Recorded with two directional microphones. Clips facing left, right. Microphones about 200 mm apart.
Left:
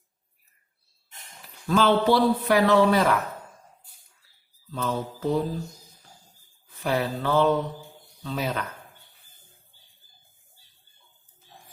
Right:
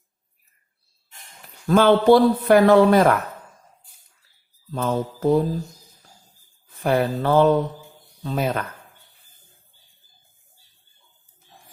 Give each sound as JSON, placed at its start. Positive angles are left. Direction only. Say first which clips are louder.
{"t": 1.6, "sound": "speech", "louder": "right 6 dB", "side_deg": -50}
{"t": 4.7, "sound": "speech", "louder": "right 5 dB", "side_deg": -50}
{"t": 6.7, "sound": "speech", "louder": "right 5 dB", "side_deg": -50}